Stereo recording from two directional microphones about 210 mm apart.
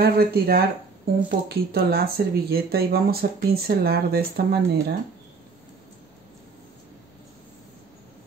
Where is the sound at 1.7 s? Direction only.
45° right (ahead or behind).